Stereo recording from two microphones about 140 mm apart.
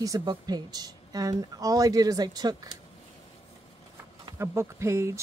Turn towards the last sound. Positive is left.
turn(degrees=-20)  # may be behind; listen again after turning